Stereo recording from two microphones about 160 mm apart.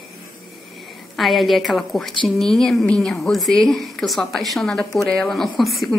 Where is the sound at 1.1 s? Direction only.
Centre (ahead or behind).